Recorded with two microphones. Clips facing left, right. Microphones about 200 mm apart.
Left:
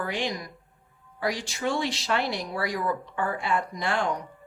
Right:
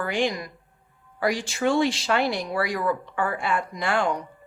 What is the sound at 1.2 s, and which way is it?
Speech, 55° right (ahead or behind).